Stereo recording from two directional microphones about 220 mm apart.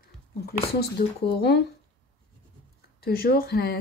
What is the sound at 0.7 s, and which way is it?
Speech, 45° left (ahead or behind).